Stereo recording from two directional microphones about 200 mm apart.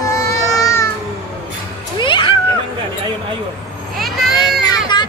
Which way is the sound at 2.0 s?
25° left (ahead or behind).